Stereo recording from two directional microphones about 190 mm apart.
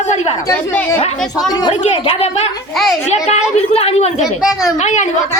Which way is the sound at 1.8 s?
30° left (ahead or behind).